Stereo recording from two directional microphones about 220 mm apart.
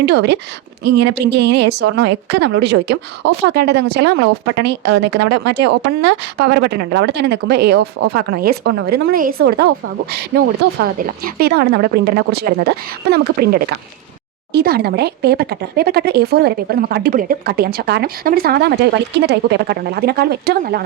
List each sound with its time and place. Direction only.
0.0 s speech: 50° right (ahead or behind)